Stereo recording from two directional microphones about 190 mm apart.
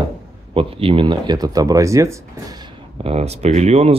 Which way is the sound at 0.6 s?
30° right (ahead or behind).